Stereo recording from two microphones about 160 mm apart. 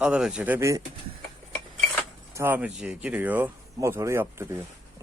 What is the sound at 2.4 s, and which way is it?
Speech, 10° right (ahead or behind).